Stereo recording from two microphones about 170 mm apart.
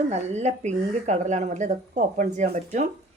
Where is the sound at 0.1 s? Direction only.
40° right (ahead or behind).